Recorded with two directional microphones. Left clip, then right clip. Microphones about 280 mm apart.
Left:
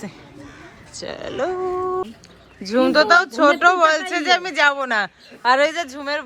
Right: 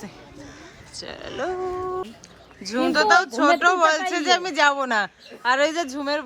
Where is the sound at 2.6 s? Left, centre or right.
Centre.